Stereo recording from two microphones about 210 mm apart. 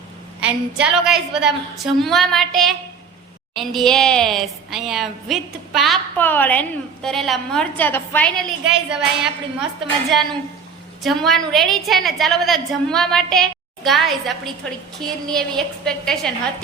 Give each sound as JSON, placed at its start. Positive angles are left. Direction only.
{"t": 0.3, "sound": "a woman's voice", "side_deg": -5}